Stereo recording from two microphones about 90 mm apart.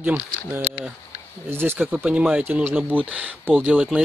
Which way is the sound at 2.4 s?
25° right (ahead or behind).